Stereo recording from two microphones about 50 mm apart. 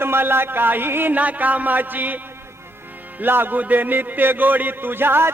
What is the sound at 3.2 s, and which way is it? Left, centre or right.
A man's voice, right.